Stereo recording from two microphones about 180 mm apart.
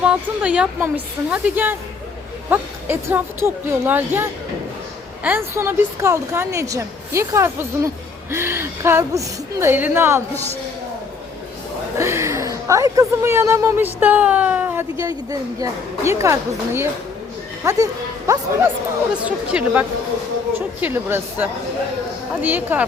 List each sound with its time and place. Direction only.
0.0 s a woman's voice: 5° right (ahead or behind)
11.9 s a woman's voice: 15° right (ahead or behind)
19.2 s a woman's voice: 5° right (ahead or behind)